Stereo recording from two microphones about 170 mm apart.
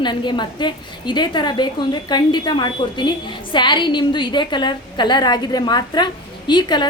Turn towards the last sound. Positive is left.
turn(degrees=25)  # may be behind; listen again after turning